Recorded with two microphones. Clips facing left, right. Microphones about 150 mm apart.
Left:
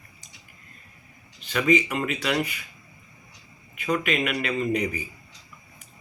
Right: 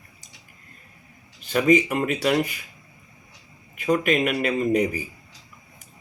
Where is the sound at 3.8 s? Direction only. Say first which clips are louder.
Right 4 dB; 40° right (ahead or behind).